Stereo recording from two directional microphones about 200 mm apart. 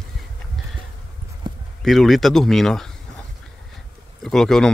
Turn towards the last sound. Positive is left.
turn(degrees=5)  # may be behind; listen again after turning